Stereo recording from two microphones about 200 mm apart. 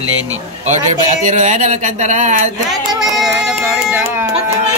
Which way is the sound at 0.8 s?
40° right (ahead or behind).